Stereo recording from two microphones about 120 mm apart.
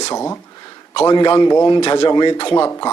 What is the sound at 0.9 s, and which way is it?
Speech, 40° left (ahead or behind).